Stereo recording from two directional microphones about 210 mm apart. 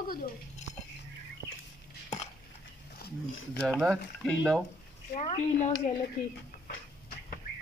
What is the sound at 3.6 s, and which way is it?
Speech, centre (ahead or behind).